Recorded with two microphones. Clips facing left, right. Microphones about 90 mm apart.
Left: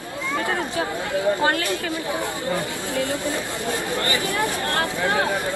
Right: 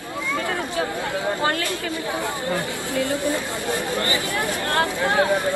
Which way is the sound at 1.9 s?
20° left (ahead or behind).